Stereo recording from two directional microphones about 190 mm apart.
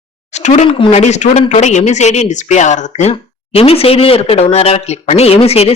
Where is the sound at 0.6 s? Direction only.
25° left (ahead or behind).